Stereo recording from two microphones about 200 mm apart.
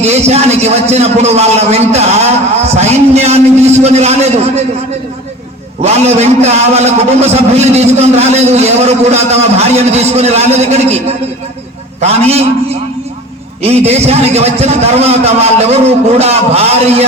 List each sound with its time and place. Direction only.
0.0 s a man's voice: 35° right (ahead or behind)
5.8 s a man's voice: 30° right (ahead or behind)
11.9 s a man's voice: 30° right (ahead or behind)
13.6 s a man's voice: 30° right (ahead or behind)